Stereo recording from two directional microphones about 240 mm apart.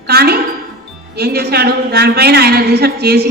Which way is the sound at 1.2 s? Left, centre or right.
Right.